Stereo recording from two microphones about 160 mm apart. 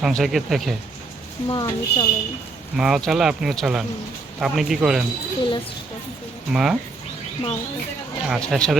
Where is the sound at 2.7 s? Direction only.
5° right (ahead or behind).